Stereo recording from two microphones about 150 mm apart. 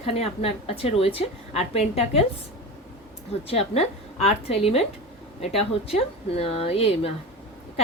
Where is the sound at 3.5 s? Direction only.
45° left (ahead or behind).